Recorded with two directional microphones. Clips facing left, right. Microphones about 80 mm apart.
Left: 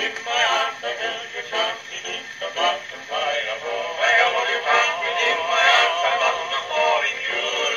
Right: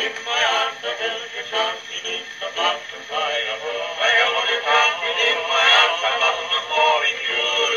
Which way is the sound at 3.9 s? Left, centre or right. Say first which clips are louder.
Left 1 dB; left.